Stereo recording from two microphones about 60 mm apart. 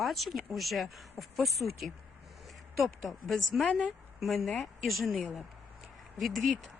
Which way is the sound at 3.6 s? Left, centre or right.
Centre.